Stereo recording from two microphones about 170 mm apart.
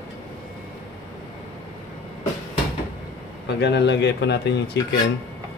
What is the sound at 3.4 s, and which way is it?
Speech, 90° left.